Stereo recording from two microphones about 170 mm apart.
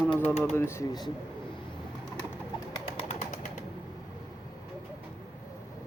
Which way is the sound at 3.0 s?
45° left (ahead or behind).